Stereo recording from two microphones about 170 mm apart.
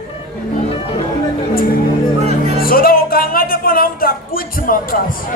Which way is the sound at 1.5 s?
60° left (ahead or behind).